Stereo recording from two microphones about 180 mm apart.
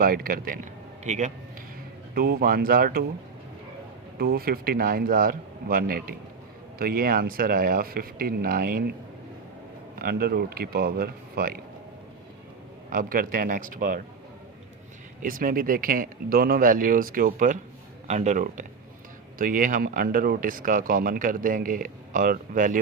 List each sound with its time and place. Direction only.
0.0 s a man's voice: 55° right (ahead or behind)
2.1 s speech: 55° right (ahead or behind)
4.2 s speech: 60° right (ahead or behind)
10.0 s speech: 55° right (ahead or behind)
12.9 s speech: 50° right (ahead or behind)
15.2 s speech: 50° right (ahead or behind)